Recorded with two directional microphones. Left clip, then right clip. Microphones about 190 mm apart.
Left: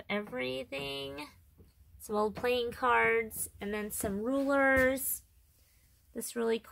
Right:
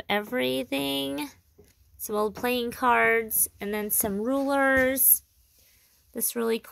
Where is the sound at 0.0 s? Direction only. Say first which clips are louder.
Right 9 dB; 40° right (ahead or behind).